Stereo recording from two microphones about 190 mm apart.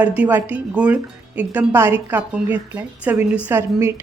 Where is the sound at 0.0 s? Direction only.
5° right (ahead or behind).